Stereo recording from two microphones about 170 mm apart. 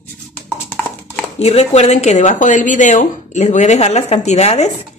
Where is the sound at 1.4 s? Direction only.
40° left (ahead or behind).